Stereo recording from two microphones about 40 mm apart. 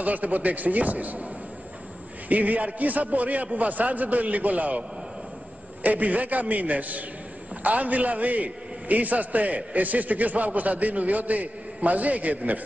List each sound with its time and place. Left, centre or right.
0.0 s a man's voice: right
2.2 s a man's voice: right
5.9 s a man's voice: right